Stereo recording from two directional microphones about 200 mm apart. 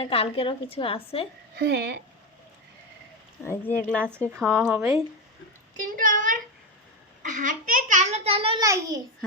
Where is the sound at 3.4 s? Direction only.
10° left (ahead or behind).